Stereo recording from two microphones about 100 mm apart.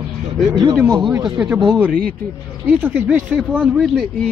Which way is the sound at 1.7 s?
20° right (ahead or behind).